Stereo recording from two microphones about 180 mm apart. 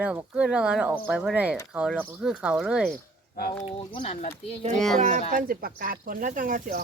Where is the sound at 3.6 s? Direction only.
35° left (ahead or behind).